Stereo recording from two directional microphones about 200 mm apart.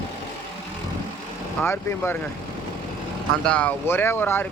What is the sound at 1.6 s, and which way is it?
Speech, 10° left (ahead or behind).